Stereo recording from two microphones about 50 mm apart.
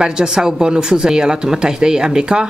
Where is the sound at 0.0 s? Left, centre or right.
Centre.